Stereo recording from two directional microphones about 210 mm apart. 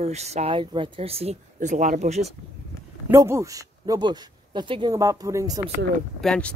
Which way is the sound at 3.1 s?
10° right (ahead or behind).